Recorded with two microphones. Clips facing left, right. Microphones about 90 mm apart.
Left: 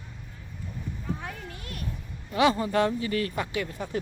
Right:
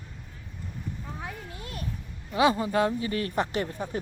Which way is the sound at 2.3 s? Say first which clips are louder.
Even; 20° right (ahead or behind).